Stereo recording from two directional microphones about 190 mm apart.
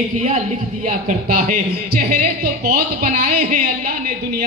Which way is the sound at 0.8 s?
45° right (ahead or behind).